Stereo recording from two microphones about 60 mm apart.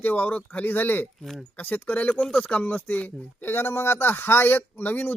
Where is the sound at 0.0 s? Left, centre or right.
Left.